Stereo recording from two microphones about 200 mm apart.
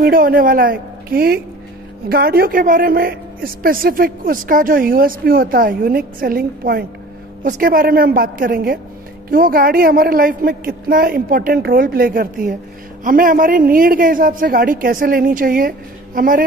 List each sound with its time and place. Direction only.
0.0 s a woman's voice: 45° right (ahead or behind)